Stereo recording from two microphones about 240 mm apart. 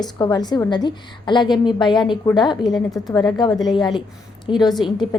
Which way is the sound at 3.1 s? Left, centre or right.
Centre.